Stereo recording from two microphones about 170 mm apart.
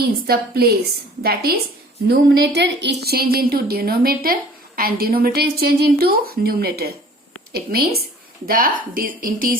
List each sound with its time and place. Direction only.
0.0 s a woman's voice: 65° right (ahead or behind)